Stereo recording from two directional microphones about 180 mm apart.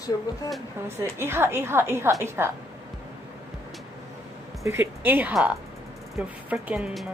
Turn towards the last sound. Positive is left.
turn(degrees=-5)  # may be behind; listen again after turning